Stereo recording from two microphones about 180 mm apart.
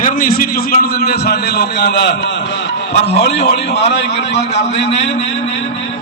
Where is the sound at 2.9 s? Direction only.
35° left (ahead or behind).